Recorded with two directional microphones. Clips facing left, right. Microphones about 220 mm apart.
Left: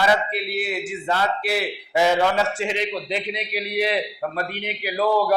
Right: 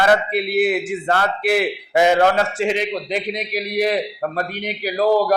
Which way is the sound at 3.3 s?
45° right (ahead or behind).